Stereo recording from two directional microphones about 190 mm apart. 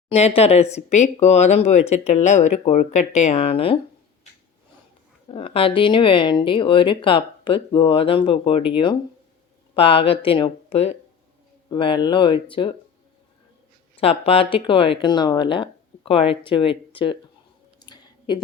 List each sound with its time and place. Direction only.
0.1 s speech: 35° left (ahead or behind)
5.3 s speech: 30° left (ahead or behind)
14.0 s speech: 30° left (ahead or behind)
17.8 s a sound: 25° left (ahead or behind)